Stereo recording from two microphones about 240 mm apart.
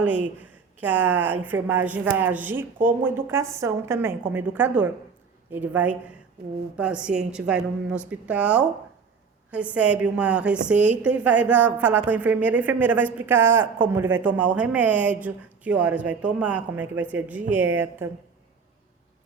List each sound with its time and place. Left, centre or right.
0.0 s a woman's voice: centre